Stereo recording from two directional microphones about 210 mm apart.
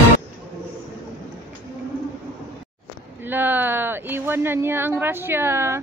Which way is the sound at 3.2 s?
10° right (ahead or behind).